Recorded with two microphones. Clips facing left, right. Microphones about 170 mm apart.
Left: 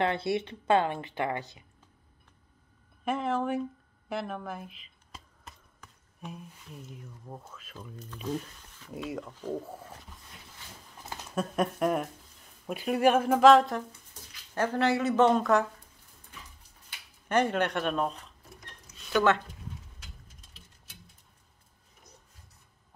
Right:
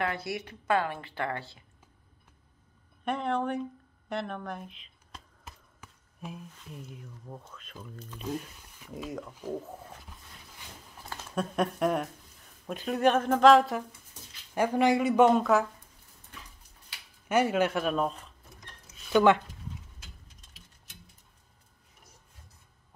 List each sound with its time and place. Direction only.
0.0 s a woman's voice: 25° left (ahead or behind)
3.1 s speech: 5° left (ahead or behind)
4.1 s a sound: 5° left (ahead or behind)
7.2 s speech: 10° left (ahead or behind); by 9.6 s 10° right (ahead or behind)
11.3 s speech: centre (ahead or behind)
14.5 s speech: 15° right (ahead or behind)
17.3 s speech: 5° right (ahead or behind)
19.1 s speech: 15° right (ahead or behind)